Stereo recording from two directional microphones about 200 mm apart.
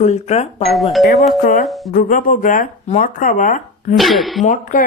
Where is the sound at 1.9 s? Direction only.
40° left (ahead or behind).